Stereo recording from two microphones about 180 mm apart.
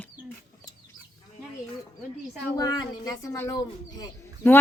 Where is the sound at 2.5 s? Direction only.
20° left (ahead or behind).